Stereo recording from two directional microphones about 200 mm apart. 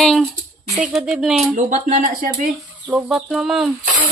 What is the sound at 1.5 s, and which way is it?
Speech, 40° right (ahead or behind).